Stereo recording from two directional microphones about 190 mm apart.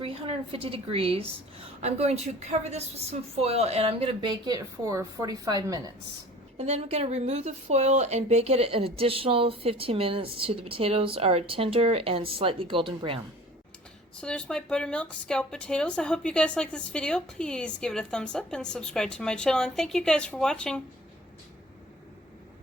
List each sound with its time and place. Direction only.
0.0 s a woman's voice: 30° right (ahead or behind)
6.6 s a woman's voice: 35° right (ahead or behind)
14.2 s speech: 5° left (ahead or behind)